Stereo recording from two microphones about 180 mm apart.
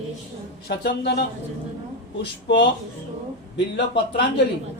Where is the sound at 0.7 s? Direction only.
65° left (ahead or behind).